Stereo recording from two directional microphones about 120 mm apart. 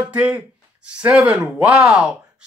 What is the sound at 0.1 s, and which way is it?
Speech, 10° right (ahead or behind).